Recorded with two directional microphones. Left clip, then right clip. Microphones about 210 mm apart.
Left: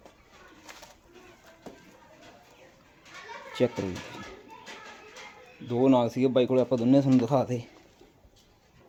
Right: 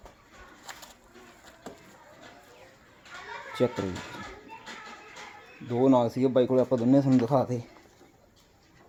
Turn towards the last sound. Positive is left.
turn(degrees=0)  # may be behind; listen again after turning